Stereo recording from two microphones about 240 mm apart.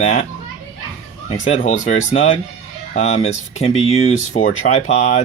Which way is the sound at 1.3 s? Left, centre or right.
Left.